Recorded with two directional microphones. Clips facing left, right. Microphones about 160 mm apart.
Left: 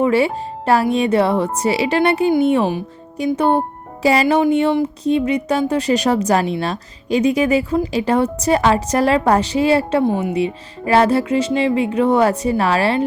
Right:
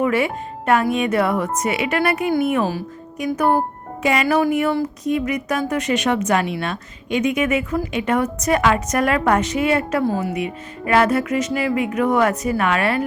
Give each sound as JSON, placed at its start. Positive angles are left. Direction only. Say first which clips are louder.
{"t": 0.0, "sound": "speech", "louder": "left 4 dB", "side_deg": 30}
{"t": 2.3, "sound": "music", "louder": "left 4 dB", "side_deg": 30}
{"t": 5.0, "sound": "speech", "louder": "left 5 dB", "side_deg": 30}
{"t": 10.3, "sound": "music", "louder": "left 5 dB", "side_deg": 30}